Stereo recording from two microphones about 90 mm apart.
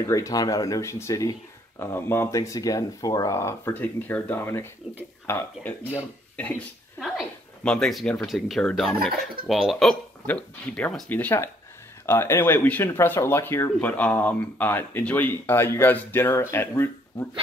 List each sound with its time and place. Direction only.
0.1 s speech: 40° left (ahead or behind)
2.3 s speech: 40° left (ahead or behind); by 5.9 s 20° left (ahead or behind)
7.6 s speech: 10° left (ahead or behind)
10.2 s speech: 15° left (ahead or behind)